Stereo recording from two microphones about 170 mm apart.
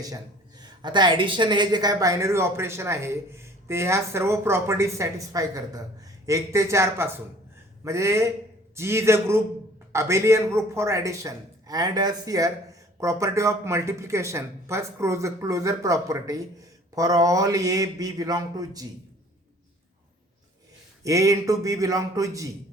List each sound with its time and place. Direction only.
0.6 s a woman's voice: 25° right (ahead or behind)
21.0 s speech: 20° right (ahead or behind)